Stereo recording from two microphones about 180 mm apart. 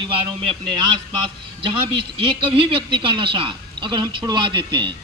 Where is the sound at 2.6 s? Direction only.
30° right (ahead or behind).